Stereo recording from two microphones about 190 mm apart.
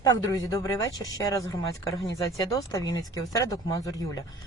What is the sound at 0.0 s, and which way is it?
Speech, 20° left (ahead or behind).